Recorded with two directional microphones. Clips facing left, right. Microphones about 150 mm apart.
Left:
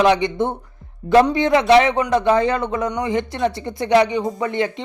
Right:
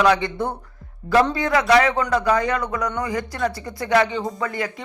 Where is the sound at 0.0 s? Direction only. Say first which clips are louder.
Left 3 dB; 20° left (ahead or behind).